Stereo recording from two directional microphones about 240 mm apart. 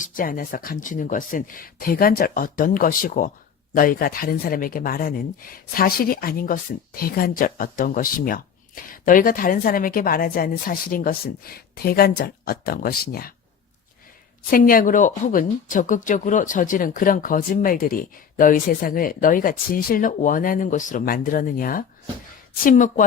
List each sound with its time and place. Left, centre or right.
0.0 s speech: left
14.5 s speech: left